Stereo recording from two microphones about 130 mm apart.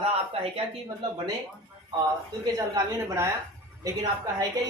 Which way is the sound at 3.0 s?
20° right (ahead or behind).